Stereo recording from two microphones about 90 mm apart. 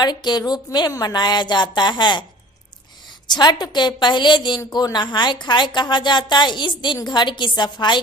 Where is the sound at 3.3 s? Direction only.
55° left (ahead or behind).